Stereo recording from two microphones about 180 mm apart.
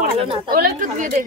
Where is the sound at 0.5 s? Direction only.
50° right (ahead or behind).